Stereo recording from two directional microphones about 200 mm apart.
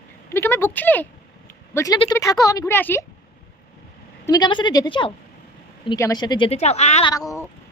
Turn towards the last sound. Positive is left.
turn(degrees=15)  # may be behind; listen again after turning